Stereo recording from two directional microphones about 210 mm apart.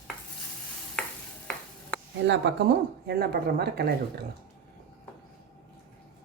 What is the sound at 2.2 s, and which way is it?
Speech, 55° right (ahead or behind).